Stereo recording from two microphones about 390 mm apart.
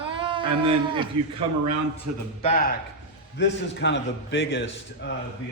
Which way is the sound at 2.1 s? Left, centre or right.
Right.